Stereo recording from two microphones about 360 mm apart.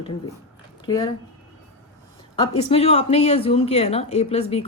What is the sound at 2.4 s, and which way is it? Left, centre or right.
Speech, centre.